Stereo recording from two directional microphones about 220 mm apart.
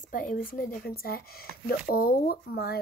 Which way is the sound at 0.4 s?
40° left (ahead or behind).